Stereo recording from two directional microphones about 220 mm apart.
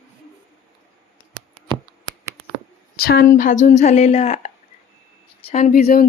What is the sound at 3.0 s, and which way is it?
A woman's voice, 45° left (ahead or behind).